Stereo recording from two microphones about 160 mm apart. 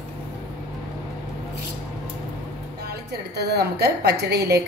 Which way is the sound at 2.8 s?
90° right.